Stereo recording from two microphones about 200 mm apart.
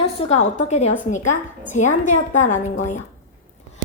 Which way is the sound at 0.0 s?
35° left (ahead or behind).